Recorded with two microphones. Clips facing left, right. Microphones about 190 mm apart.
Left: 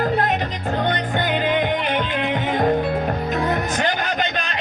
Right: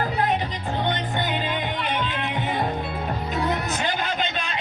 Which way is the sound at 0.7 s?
45° left (ahead or behind).